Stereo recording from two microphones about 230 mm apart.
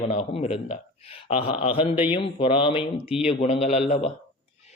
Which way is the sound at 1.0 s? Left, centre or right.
Left.